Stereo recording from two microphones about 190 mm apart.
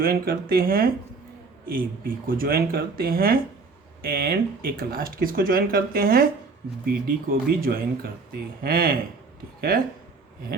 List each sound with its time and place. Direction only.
0.0 s speech: 50° right (ahead or behind)